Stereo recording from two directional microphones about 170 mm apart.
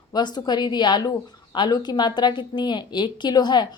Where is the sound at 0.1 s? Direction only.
25° left (ahead or behind).